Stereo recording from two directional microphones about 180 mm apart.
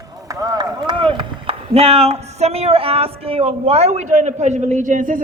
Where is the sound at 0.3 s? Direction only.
20° right (ahead or behind).